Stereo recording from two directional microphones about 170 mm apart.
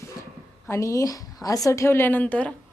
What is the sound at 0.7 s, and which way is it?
A woman's voice, 20° left (ahead or behind).